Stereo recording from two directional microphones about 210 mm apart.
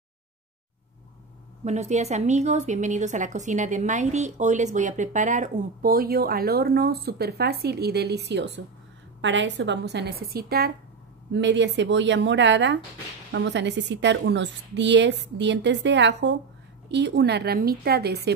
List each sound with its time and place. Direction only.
1.6 s a woman's voice: 35° right (ahead or behind); by 18.3 s 50° right (ahead or behind)